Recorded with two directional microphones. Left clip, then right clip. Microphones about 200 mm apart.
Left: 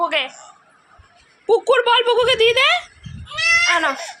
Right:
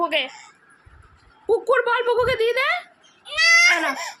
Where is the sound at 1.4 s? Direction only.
Centre (ahead or behind).